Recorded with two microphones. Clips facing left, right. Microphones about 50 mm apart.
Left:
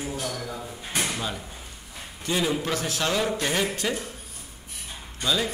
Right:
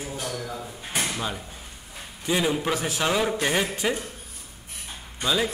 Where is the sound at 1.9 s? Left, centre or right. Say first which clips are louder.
Right 2 dB; centre.